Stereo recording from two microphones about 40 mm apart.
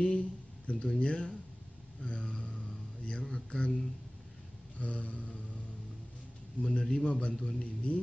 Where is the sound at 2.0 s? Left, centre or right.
Left.